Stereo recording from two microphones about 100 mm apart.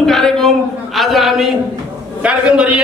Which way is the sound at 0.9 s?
Centre (ahead or behind).